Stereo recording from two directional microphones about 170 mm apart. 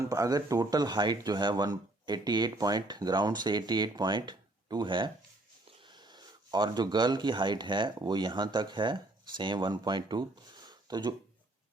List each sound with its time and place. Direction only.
0.0 s speech: 20° right (ahead or behind)